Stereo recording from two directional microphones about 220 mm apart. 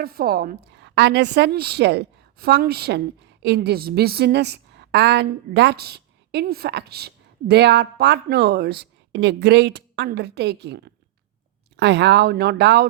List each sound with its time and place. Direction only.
0.0 s a woman's voice: 45° right (ahead or behind)